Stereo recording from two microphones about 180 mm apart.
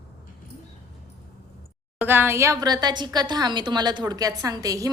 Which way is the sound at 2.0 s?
10° right (ahead or behind).